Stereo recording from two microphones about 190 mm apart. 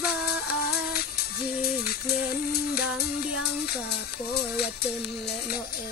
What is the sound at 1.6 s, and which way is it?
Music, 55° left (ahead or behind).